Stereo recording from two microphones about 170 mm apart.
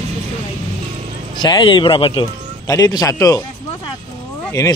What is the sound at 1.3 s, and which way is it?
Speech, 25° left (ahead or behind).